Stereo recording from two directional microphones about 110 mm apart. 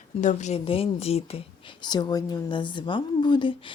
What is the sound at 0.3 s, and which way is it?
Speech, 90° left.